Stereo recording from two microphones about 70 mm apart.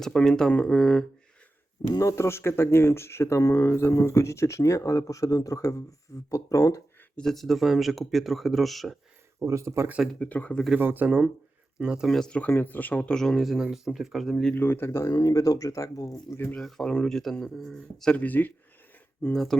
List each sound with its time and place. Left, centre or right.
0.0 s speech: centre
2.0 s speech: left
7.2 s speech: centre
9.5 s speech: right
10.1 s speech: centre
10.8 s speech: right
12.0 s speech: centre
12.3 s speech: left; by 14.5 s centre
14.5 s speech: left
15.1 s speech: left
16.6 s speech: centre
18.2 s speech: left
19.3 s speech: centre